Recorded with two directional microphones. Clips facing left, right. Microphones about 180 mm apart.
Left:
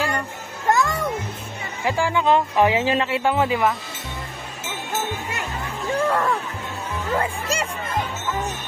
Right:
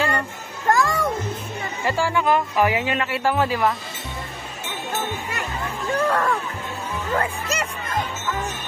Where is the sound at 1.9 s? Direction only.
15° left (ahead or behind).